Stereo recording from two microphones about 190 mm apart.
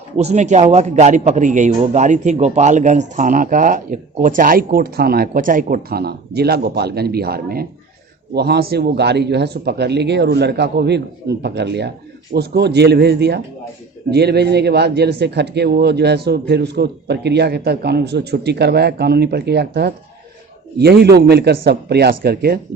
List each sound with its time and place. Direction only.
0.2 s a man's voice: 35° right (ahead or behind); by 22.6 s 55° right (ahead or behind)